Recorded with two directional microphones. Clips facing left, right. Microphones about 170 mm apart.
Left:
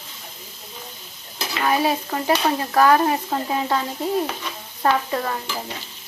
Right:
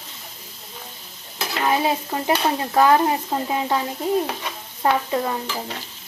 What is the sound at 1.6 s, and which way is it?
Stir, 20° right (ahead or behind).